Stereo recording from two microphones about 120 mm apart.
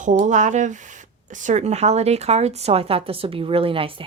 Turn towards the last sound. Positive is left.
turn(degrees=-50)  # may be behind; listen again after turning